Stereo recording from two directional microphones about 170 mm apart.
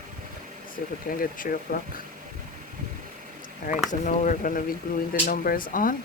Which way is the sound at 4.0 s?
45° left (ahead or behind).